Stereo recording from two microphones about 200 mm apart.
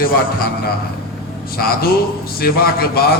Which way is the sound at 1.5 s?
50° left (ahead or behind).